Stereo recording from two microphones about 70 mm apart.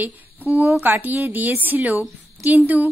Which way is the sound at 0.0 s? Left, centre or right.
Right.